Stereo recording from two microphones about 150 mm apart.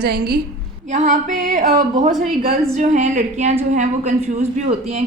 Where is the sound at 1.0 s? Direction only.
60° right (ahead or behind).